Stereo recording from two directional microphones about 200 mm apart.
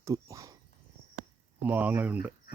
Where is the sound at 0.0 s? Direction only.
15° right (ahead or behind).